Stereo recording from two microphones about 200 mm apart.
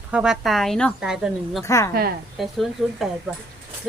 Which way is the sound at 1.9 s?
50° right (ahead or behind).